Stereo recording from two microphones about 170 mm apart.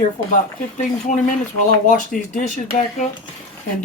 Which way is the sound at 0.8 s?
45° left (ahead or behind).